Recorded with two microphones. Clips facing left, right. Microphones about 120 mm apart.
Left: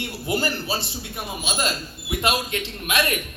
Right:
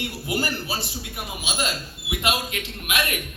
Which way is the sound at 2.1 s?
35° left (ahead or behind).